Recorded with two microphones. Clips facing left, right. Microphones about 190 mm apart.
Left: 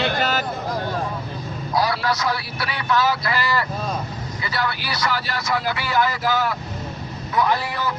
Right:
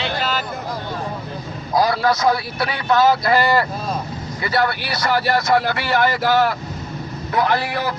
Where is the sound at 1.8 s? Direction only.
45° right (ahead or behind).